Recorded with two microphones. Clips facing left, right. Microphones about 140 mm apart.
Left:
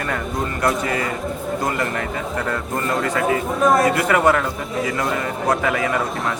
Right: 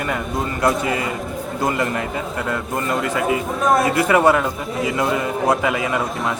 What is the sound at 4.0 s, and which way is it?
Speech, 20° right (ahead or behind).